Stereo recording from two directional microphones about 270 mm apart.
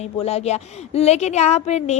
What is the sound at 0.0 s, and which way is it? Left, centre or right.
Speech, left.